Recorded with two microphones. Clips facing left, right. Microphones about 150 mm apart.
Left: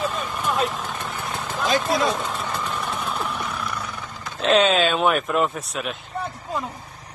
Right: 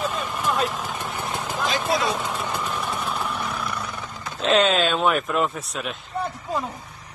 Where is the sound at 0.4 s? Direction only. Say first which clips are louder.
Even; centre (ahead or behind).